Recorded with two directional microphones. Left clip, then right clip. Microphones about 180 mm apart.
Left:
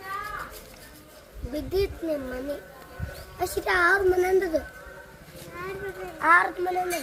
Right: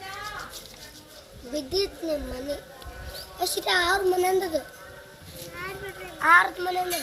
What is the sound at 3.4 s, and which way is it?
A child's voice, 45° left (ahead or behind).